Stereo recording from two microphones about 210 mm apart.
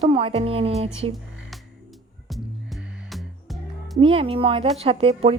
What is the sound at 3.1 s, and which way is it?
Music, centre (ahead or behind).